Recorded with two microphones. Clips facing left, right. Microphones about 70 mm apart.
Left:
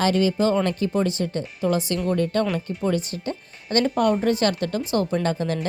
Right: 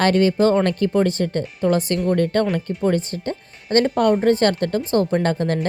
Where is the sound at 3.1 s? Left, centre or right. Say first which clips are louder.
Right 3 dB; right.